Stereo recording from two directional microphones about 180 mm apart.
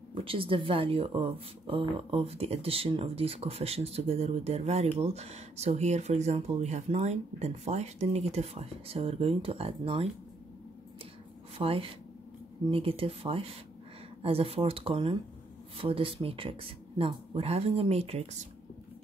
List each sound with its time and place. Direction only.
0.1 s speech: 30° right (ahead or behind)
11.5 s speech: 30° right (ahead or behind)